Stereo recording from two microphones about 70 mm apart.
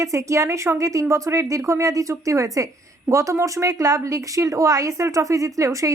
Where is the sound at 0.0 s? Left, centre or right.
Right.